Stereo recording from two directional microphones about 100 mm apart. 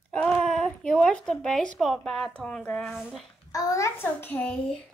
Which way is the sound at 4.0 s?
20° left (ahead or behind).